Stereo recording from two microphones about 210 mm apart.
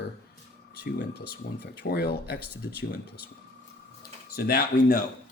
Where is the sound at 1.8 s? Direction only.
50° left (ahead or behind).